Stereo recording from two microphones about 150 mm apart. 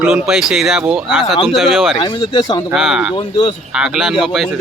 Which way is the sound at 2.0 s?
30° left (ahead or behind).